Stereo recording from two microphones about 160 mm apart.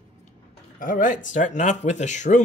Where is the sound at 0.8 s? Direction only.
55° left (ahead or behind).